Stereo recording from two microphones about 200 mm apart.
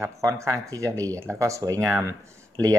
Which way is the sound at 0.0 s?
15° right (ahead or behind).